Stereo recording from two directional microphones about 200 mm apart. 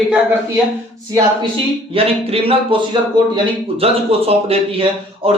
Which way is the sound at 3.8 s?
30° right (ahead or behind).